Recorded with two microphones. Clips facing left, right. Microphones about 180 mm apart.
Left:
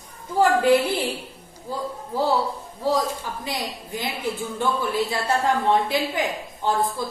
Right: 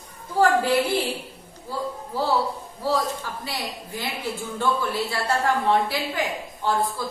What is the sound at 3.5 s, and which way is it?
A woman's voice, 20° left (ahead or behind).